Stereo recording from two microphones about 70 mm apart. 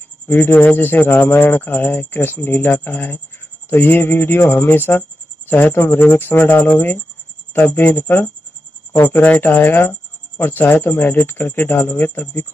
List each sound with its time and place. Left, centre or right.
0.3 s speech: left